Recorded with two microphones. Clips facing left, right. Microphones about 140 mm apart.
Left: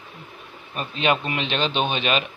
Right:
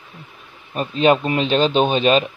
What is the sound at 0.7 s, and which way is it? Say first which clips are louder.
Speech: right 7 dB; 35° right (ahead or behind).